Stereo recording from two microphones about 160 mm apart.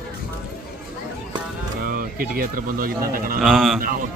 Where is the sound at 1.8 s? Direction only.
60° right (ahead or behind).